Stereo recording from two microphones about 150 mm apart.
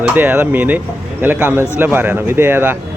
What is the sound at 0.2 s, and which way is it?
Speech, 10° right (ahead or behind).